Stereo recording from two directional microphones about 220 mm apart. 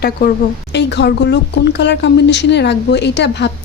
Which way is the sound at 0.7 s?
50° left (ahead or behind).